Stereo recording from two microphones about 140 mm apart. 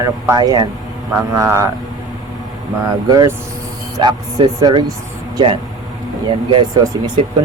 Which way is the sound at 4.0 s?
35° right (ahead or behind).